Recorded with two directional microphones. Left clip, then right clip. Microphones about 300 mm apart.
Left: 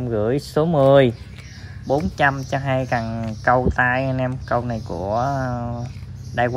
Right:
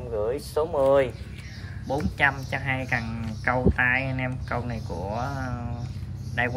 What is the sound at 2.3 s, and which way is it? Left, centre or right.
Speech, right.